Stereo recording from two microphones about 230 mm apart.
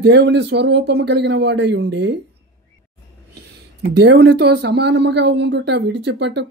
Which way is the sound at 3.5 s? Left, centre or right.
Right.